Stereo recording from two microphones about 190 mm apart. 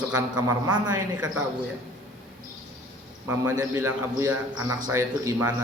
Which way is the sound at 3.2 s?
15° right (ahead or behind).